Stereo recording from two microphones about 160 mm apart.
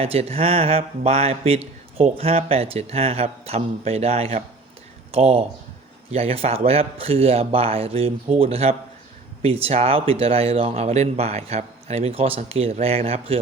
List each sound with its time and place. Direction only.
0.0 s speech: 40° right (ahead or behind)